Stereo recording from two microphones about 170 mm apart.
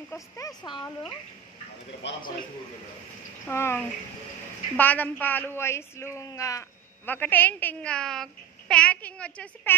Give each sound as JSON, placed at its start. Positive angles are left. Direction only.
{"t": 0.1, "sound": "speech", "side_deg": 20}
{"t": 3.4, "sound": "a child's voice", "side_deg": 15}